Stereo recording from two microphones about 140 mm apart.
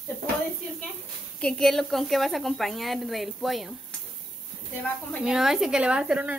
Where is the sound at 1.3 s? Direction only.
5° left (ahead or behind).